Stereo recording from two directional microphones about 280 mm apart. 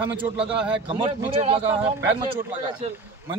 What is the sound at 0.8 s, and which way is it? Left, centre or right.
Speech, centre.